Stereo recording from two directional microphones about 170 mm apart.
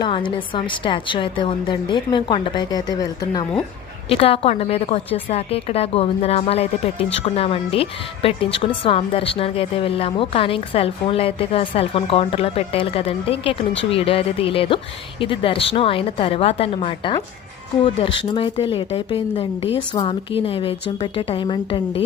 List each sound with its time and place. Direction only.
0.0 s a woman's voice: 30° left (ahead or behind)
4.1 s a woman's voice: 35° left (ahead or behind)